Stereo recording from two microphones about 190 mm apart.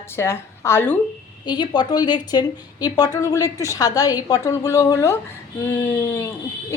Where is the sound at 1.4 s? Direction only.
20° left (ahead or behind).